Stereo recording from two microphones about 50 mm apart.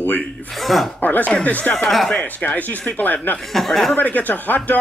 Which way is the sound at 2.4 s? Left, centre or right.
Left.